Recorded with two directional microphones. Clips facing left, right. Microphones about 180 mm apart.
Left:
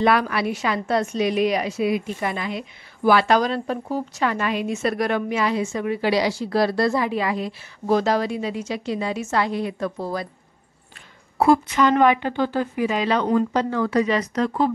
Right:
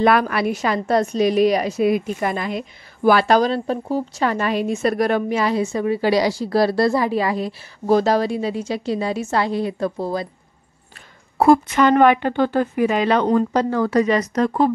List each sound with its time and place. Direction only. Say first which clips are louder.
0.0 s a woman's voice: right 3 dB; 50° right (ahead or behind); by 10.2 s 25° right (ahead or behind)
11.3 s a woman's voice: right 3 dB; 50° right (ahead or behind)
13.3 s speech: right 3 dB; 40° right (ahead or behind)